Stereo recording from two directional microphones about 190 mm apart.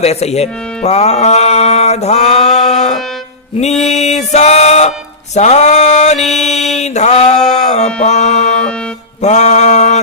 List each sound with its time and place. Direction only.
0.0 s speech: 35° left (ahead or behind)
3.9 s music: 35° left (ahead or behind)
5.3 s a sound: 35° left (ahead or behind)
8.0 s mantra: 35° left (ahead or behind)